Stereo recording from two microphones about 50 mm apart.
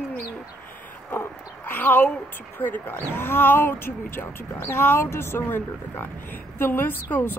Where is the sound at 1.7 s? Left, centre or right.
Left.